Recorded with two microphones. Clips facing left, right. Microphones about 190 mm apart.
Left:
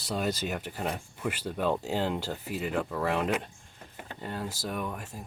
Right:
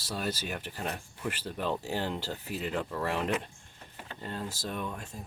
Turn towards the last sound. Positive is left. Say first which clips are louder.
# left 2 dB
turn(degrees=5)  # may be behind; listen again after turning